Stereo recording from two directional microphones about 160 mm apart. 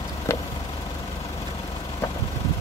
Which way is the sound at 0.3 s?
15° left (ahead or behind).